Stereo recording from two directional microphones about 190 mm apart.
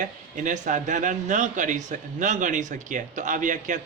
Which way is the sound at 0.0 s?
40° right (ahead or behind).